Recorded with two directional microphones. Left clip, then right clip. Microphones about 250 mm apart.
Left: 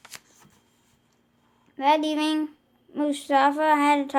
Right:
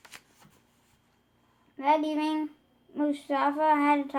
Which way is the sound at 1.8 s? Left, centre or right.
Left.